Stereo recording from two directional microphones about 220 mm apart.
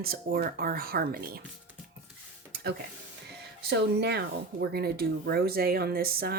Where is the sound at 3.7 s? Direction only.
50° right (ahead or behind).